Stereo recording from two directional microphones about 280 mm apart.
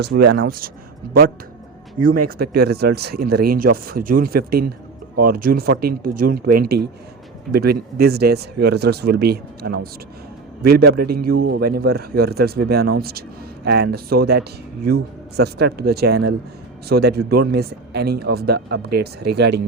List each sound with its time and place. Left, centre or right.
0.0 s speech: right
2.2 s speech: right
7.5 s speech: right